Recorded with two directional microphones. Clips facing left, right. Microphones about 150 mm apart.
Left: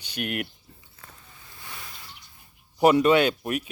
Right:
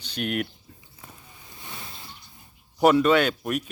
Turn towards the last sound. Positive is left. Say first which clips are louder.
# left 1 dB
turn(degrees=5)  # may be behind; listen again after turning